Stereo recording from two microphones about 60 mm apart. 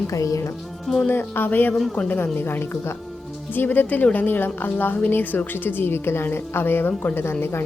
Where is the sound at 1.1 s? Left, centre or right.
Left.